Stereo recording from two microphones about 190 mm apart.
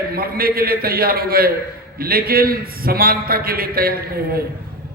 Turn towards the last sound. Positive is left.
turn(degrees=-50)  # may be behind; listen again after turning